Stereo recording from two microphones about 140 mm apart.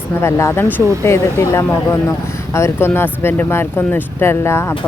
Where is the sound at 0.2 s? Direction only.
20° left (ahead or behind).